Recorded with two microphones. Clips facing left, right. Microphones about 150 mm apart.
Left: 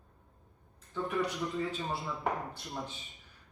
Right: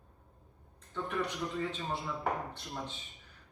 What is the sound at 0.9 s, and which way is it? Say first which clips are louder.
Speech: left 3 dB; centre (ahead or behind).